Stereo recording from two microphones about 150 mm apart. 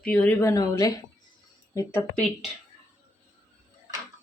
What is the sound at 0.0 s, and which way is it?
Speech, 10° left (ahead or behind).